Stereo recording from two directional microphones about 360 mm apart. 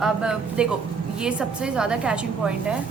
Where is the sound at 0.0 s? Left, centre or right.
Centre.